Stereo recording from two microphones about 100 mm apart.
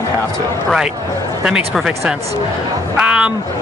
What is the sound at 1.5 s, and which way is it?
Speech, 10° right (ahead or behind).